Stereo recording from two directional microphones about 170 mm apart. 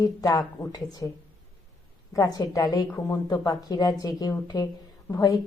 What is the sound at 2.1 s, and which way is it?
A woman's voice, 20° left (ahead or behind).